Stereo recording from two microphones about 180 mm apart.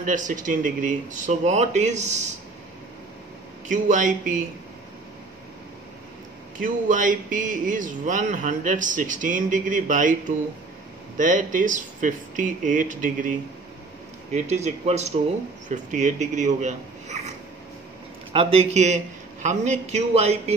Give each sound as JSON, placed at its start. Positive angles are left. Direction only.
{"t": 0.0, "sound": "speech", "side_deg": -45}
{"t": 3.6, "sound": "speech", "side_deg": -45}
{"t": 6.6, "sound": "speech", "side_deg": -45}
{"t": 11.1, "sound": "a man's voice", "side_deg": -45}
{"t": 18.3, "sound": "a man's voice", "side_deg": -30}